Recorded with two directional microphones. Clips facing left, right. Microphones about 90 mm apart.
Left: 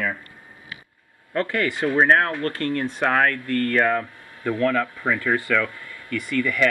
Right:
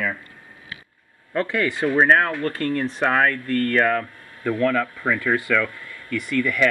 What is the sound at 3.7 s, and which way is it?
Speech, 5° left (ahead or behind).